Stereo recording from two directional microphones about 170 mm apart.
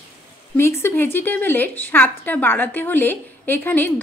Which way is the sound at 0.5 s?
15° left (ahead or behind).